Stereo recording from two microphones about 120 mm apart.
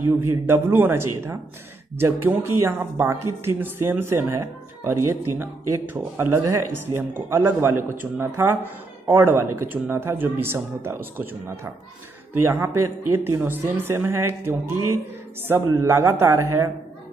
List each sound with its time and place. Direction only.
0.5 s speech: 20° right (ahead or behind)